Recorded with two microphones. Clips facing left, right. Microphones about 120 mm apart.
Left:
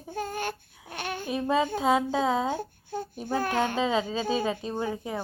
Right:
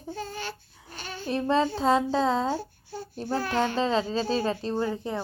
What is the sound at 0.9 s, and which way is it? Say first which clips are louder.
Child singing: left 4 dB; 60° left (ahead or behind).